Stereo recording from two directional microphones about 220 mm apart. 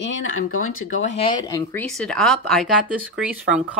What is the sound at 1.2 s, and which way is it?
Speech, 15° left (ahead or behind).